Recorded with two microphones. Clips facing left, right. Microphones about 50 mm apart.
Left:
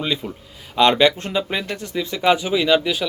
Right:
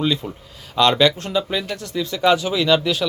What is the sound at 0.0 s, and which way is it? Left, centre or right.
Speech, centre.